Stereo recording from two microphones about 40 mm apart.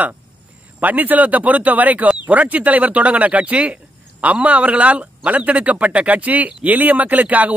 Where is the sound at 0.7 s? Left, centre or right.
Right.